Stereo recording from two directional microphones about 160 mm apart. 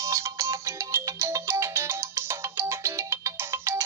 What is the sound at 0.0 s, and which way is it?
Music, 15° right (ahead or behind).